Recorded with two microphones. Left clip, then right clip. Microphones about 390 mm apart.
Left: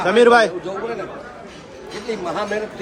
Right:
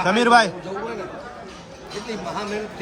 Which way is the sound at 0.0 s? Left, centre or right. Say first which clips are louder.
Left 3 dB; centre.